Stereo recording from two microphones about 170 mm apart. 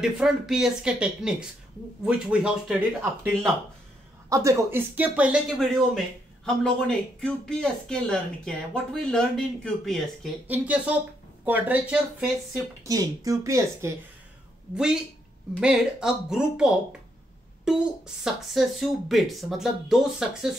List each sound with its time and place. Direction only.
0.0 s speech: 5° right (ahead or behind)
4.3 s speech: 20° right (ahead or behind)
6.4 s speech: 5° left (ahead or behind)
10.4 s speech: 10° right (ahead or behind)
12.8 s speech: 20° right (ahead or behind)
15.6 s speech: 5° right (ahead or behind)